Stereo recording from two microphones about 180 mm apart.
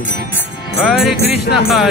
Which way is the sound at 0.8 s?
Centre (ahead or behind).